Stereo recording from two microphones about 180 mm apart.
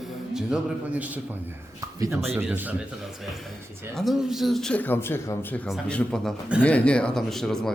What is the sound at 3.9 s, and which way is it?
Speech, centre (ahead or behind).